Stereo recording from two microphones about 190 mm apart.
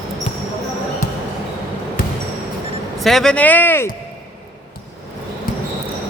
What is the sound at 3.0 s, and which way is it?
Speech, centre (ahead or behind).